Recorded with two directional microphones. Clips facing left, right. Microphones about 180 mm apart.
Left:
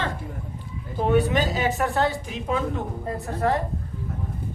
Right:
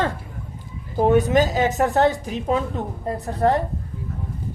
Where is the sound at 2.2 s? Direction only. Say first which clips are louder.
Right 3 dB; 40° right (ahead or behind).